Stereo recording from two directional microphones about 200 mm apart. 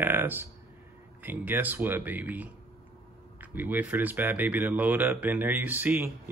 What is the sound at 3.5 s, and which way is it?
Speech, 10° right (ahead or behind).